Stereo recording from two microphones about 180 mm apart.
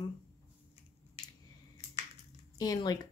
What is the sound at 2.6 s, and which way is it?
Speech, 20° left (ahead or behind).